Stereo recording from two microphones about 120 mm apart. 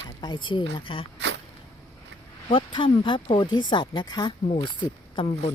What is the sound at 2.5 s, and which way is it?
Speech, 45° left (ahead or behind).